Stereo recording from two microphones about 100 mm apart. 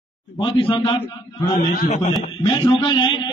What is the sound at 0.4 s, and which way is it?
Speech, 60° left (ahead or behind).